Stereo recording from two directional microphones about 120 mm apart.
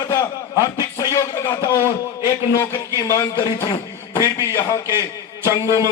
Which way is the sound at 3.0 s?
25° left (ahead or behind).